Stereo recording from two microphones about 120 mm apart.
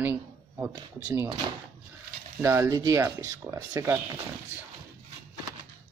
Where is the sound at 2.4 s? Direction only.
25° right (ahead or behind).